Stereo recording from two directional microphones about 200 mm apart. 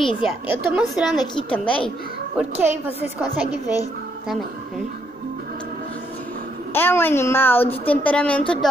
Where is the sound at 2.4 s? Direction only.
10° right (ahead or behind).